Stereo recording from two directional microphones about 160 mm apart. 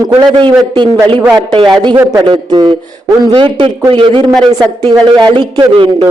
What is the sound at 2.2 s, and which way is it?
A man's voice, 30° right (ahead or behind).